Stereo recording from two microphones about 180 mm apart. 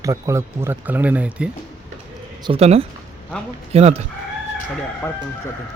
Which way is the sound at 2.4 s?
35° right (ahead or behind).